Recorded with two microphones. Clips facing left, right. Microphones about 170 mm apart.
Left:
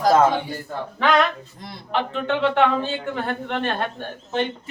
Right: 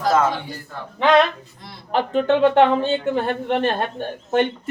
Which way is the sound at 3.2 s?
30° right (ahead or behind).